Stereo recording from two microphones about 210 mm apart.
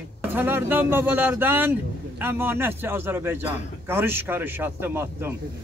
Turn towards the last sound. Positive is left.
turn(degrees=-10)  # may be behind; listen again after turning